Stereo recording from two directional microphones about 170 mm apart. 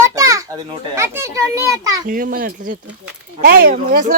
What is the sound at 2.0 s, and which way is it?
Speech, 55° right (ahead or behind).